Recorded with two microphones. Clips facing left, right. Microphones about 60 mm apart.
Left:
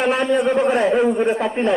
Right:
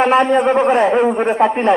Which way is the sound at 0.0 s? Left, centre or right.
Right.